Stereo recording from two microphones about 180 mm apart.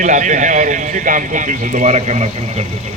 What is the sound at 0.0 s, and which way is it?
Speech, 45° right (ahead or behind).